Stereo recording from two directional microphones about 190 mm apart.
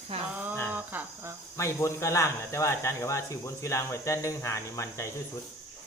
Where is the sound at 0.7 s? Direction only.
10° right (ahead or behind).